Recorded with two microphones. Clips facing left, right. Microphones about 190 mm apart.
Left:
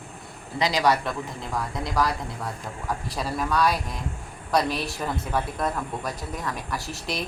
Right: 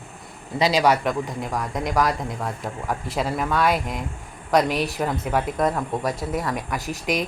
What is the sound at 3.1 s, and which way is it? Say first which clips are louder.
A man's voice: right 2 dB; 20° right (ahead or behind).